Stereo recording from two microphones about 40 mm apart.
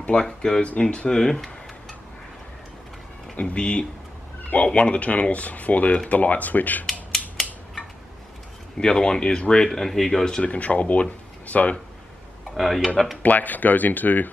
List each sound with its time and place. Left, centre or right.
0.2 s speech: centre
0.7 s speech: left
1.1 s tick-tock: centre
3.3 s speech: left
6.9 s scissors: centre
8.7 s speech: centre
9.7 s speech: centre
10.4 s speech: left
12.5 s speech: centre
12.8 s speech: centre
13.2 s speech: left